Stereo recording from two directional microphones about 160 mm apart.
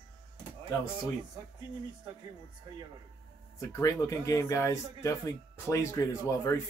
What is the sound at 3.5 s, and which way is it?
Speech, 20° left (ahead or behind).